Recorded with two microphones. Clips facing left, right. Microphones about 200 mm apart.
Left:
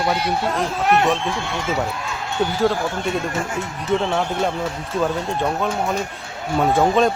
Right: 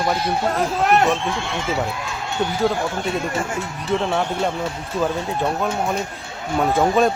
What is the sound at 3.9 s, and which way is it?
Speech, centre (ahead or behind).